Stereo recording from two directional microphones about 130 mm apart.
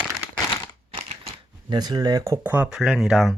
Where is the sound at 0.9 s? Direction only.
40° right (ahead or behind).